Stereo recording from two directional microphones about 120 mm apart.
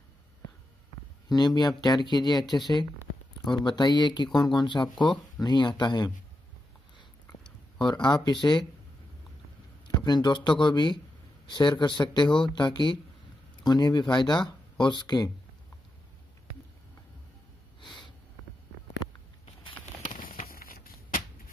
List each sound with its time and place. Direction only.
1.3 s speech: 35° left (ahead or behind)
7.8 s speech: 35° left (ahead or behind)
9.8 s speech: 35° left (ahead or behind)